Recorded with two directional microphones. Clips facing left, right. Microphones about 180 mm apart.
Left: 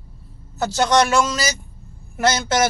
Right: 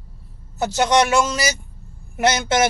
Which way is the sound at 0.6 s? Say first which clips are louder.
Even; 20° right (ahead or behind).